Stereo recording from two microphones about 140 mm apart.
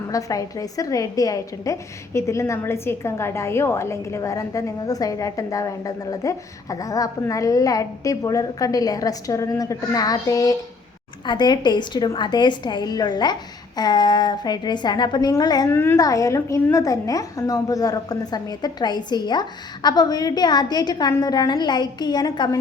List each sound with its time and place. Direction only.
0.1 s a woman's voice: 25° left (ahead or behind)
15.7 s a woman's voice: 15° left (ahead or behind)